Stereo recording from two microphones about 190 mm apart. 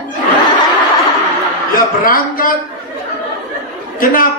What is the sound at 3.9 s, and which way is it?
Speech, 45° left (ahead or behind).